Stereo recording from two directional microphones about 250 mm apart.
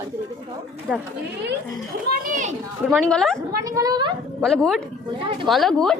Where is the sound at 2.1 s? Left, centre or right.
Right.